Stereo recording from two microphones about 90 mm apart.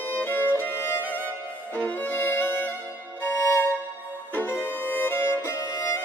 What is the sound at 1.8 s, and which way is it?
Violin, 20° left (ahead or behind).